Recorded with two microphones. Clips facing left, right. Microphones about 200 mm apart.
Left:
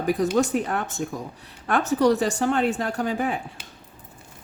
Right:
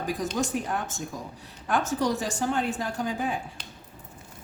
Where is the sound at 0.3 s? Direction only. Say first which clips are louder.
Left 6 dB; 65° left (ahead or behind).